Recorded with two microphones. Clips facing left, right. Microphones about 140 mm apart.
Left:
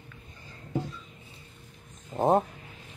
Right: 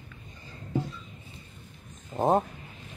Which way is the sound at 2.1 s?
Centre (ahead or behind).